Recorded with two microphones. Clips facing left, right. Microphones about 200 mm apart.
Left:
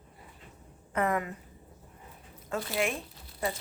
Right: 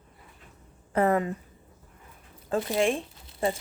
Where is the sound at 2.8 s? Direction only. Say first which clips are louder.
Right 5 dB; 30° right (ahead or behind).